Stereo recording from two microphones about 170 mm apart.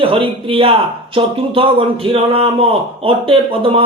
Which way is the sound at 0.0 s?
30° right (ahead or behind).